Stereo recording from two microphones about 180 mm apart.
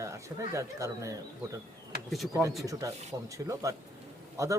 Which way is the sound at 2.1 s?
Centre (ahead or behind).